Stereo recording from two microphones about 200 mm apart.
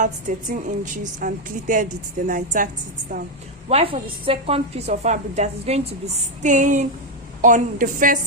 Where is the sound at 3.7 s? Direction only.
30° right (ahead or behind).